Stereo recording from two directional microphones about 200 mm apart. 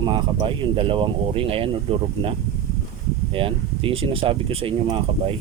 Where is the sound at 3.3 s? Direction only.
25° right (ahead or behind).